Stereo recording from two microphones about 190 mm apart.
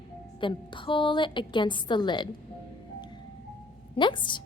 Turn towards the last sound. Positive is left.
turn(degrees=25)  # may be behind; listen again after turning